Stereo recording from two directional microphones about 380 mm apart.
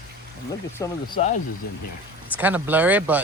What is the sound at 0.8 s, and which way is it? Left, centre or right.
Speech, centre.